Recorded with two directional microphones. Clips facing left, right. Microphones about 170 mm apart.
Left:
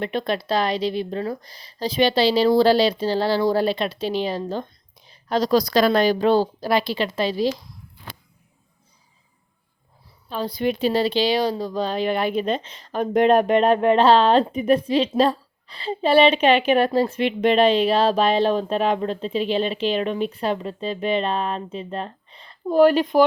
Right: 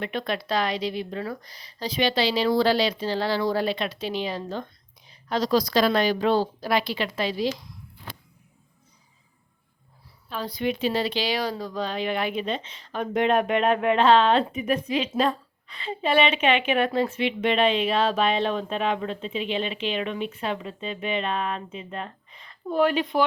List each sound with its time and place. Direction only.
0.0 s speech: 30° left (ahead or behind)
10.2 s speech: 30° left (ahead or behind)